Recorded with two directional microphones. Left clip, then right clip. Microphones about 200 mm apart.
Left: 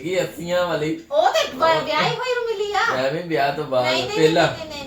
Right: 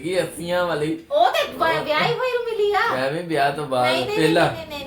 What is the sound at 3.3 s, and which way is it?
Speech, 5° right (ahead or behind).